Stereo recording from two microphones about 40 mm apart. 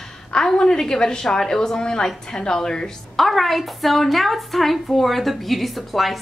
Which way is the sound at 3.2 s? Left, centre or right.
Centre.